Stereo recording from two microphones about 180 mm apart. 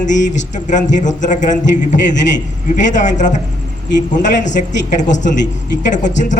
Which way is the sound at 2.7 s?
45° left (ahead or behind).